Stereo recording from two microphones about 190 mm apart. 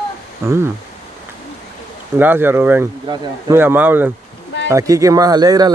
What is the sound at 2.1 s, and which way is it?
A man's voice, 10° right (ahead or behind).